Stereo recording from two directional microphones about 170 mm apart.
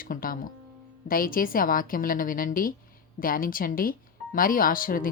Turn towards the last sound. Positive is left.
turn(degrees=55)  # may be behind; listen again after turning